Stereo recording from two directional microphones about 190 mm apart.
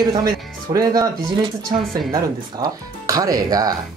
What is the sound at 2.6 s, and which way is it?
Speech, 20° right (ahead or behind).